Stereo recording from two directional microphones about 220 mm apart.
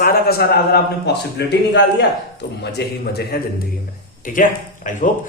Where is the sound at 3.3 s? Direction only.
45° left (ahead or behind).